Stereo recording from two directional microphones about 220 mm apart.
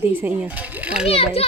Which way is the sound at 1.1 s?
25° left (ahead or behind).